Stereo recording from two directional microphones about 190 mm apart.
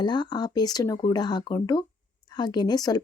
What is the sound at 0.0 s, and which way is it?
Speech, 25° left (ahead or behind).